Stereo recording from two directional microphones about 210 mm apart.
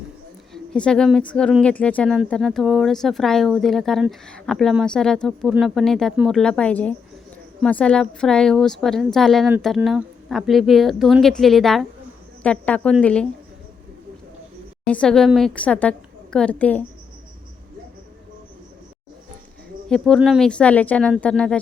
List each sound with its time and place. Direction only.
0.5 s a woman's voice: 5° left (ahead or behind)
14.8 s a woman's voice: 5° left (ahead or behind)
19.9 s a woman's voice: centre (ahead or behind)